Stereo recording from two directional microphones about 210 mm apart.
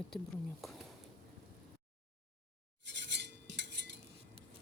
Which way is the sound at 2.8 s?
55° right (ahead or behind).